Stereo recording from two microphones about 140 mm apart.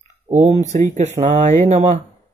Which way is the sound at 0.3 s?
55° right (ahead or behind).